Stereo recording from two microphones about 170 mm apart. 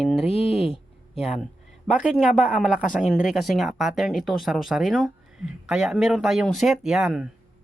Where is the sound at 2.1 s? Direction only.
Centre (ahead or behind).